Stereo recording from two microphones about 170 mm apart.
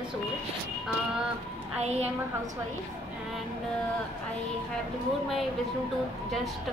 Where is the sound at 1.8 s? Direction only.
40° right (ahead or behind).